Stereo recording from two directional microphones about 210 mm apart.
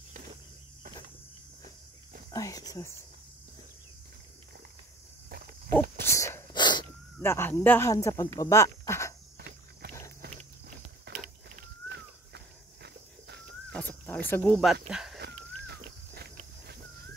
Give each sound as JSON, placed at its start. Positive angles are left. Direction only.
{"t": 2.3, "sound": "speech", "side_deg": 15}
{"t": 5.8, "sound": "dog", "side_deg": 15}
{"t": 7.2, "sound": "speech", "side_deg": 10}
{"t": 9.4, "sound": "insect", "side_deg": -50}
{"t": 11.1, "sound": "a sound", "side_deg": -45}
{"t": 13.7, "sound": "a sound", "side_deg": 10}
{"t": 14.3, "sound": "speech", "side_deg": 5}
{"t": 15.6, "sound": "walk", "side_deg": -50}